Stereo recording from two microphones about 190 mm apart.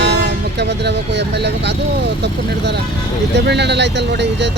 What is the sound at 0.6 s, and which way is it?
Speech, 60° right (ahead or behind).